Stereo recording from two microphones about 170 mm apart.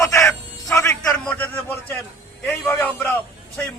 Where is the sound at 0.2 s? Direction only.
Centre (ahead or behind).